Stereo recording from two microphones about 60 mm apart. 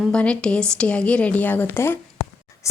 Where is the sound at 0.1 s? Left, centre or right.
Centre; by 2.0 s left.